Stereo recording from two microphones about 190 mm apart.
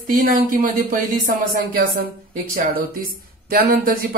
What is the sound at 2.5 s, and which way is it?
Speech, 50° right (ahead or behind).